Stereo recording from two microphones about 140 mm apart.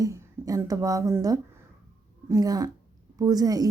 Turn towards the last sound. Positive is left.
turn(degrees=-25)  # may be behind; listen again after turning